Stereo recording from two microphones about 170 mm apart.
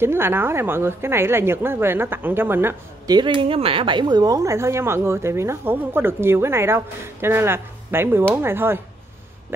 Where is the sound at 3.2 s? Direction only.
30° right (ahead or behind).